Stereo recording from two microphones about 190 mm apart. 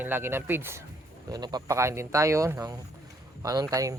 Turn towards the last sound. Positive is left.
turn(degrees=-15)  # may be behind; listen again after turning